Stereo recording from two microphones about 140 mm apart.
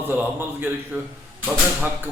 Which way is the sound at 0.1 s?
15° right (ahead or behind).